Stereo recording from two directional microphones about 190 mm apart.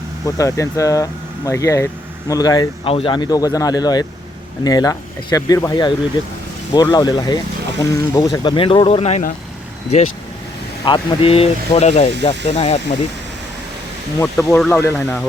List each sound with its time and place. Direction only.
0.3 s speech: 15° left (ahead or behind); by 9.3 s 35° left (ahead or behind)
10.8 s speech: 25° left (ahead or behind)
14.3 s speech: centre (ahead or behind)